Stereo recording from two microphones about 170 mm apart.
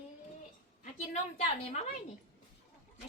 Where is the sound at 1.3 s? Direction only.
40° left (ahead or behind).